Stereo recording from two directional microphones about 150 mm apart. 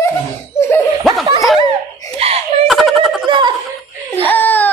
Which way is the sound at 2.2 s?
40° right (ahead or behind).